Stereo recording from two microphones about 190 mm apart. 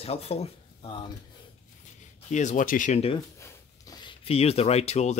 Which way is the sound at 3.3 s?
15° left (ahead or behind).